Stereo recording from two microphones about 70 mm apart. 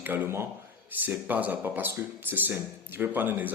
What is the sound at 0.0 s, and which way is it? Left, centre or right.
Speech, right.